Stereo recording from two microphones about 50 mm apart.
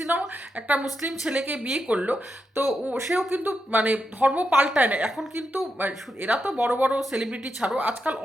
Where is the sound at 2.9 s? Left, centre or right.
Centre.